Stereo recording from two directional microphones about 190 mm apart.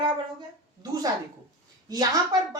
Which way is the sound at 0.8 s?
20° right (ahead or behind).